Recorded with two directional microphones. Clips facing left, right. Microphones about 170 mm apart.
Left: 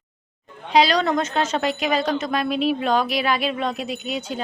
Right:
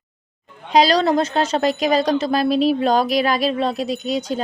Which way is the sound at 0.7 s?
40° right (ahead or behind).